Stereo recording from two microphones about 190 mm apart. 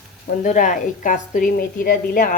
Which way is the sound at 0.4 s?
45° left (ahead or behind).